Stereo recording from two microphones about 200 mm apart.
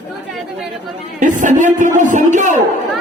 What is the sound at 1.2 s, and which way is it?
A man's voice, 40° right (ahead or behind).